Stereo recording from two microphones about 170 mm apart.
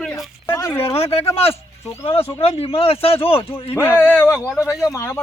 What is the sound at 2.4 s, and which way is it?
Speech, 35° left (ahead or behind).